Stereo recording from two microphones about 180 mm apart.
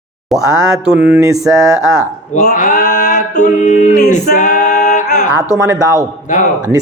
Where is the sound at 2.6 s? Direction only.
45° left (ahead or behind).